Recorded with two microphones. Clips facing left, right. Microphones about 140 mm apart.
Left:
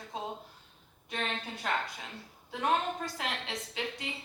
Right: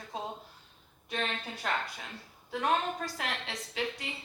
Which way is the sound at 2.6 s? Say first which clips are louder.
Even; 20° left (ahead or behind).